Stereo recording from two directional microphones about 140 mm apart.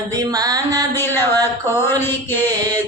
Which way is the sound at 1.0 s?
15° left (ahead or behind).